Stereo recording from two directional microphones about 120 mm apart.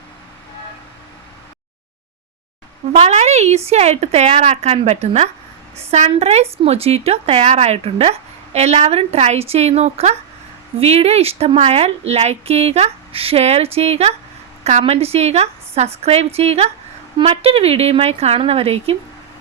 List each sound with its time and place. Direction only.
2.9 s a woman's voice: 70° right (ahead or behind); by 18.9 s 55° right (ahead or behind)